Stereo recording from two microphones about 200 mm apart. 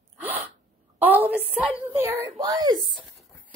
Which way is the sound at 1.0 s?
10° right (ahead or behind).